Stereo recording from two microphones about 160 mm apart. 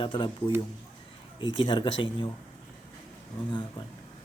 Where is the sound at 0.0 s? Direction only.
30° left (ahead or behind).